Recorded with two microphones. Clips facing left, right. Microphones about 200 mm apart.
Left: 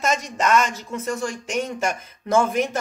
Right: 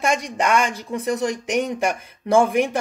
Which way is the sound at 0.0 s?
15° right (ahead or behind).